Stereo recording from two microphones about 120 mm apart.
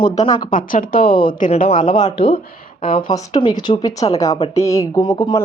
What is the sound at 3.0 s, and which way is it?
A woman's voice, 35° left (ahead or behind).